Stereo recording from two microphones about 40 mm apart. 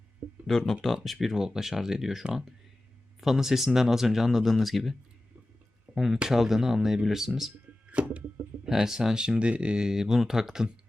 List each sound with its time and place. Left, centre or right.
0.4 s speech: centre
7.9 s a sound: right
8.6 s speech: centre